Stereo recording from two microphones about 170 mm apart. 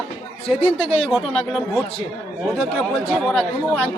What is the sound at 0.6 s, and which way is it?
Speech, 30° left (ahead or behind).